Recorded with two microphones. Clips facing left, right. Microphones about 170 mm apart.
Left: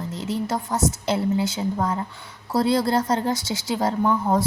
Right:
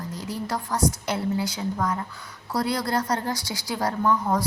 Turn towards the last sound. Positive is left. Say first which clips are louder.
# left 2 dB
turn(degrees=25)  # may be behind; listen again after turning